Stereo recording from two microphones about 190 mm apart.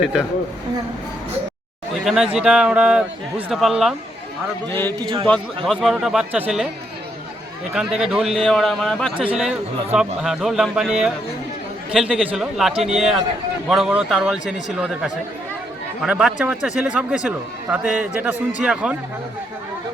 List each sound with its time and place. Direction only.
0.0 s a man's voice: 5° right (ahead or behind)
2.0 s a man's voice: centre (ahead or behind)
4.7 s a man's voice: 10° left (ahead or behind)
4.9 s a man's voice: 25° right (ahead or behind)
5.6 s a man's voice: centre (ahead or behind)
7.7 s a man's voice: 5° right (ahead or behind)